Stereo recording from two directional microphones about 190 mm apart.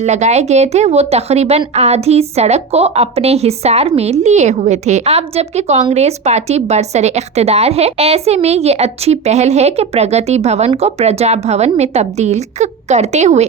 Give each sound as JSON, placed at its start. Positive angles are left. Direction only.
{"t": 0.0, "sound": "speech", "side_deg": -35}